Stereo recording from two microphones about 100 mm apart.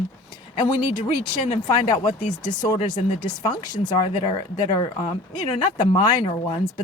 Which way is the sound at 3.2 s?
45° left (ahead or behind).